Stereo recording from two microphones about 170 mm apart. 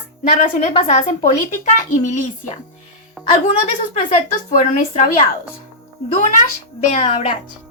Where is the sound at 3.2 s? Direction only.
5° right (ahead or behind).